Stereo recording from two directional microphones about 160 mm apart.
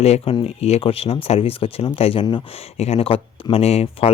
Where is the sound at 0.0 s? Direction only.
40° left (ahead or behind).